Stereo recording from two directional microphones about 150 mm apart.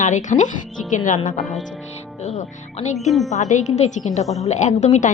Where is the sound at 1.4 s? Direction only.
Centre (ahead or behind).